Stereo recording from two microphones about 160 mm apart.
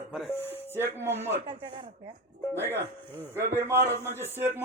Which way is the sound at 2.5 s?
15° right (ahead or behind).